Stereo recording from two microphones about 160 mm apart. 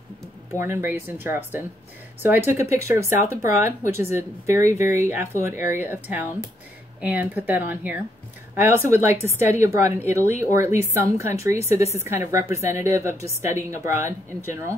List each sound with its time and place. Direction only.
0.6 s speech: 15° right (ahead or behind)
11.8 s a woman's voice: 40° left (ahead or behind)
12.1 s speech: 15° right (ahead or behind)